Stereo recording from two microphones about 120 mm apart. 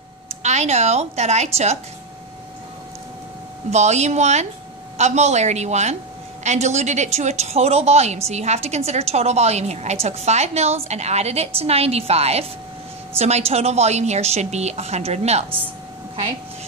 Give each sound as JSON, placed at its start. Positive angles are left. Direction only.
{"t": 0.4, "sound": "a woman's voice", "side_deg": -70}
{"t": 3.7, "sound": "a woman's voice", "side_deg": -70}